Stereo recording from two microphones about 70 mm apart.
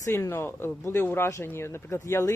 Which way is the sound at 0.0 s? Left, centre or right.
Left.